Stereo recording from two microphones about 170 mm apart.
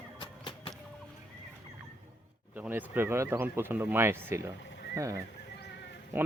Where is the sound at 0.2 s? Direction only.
30° left (ahead or behind).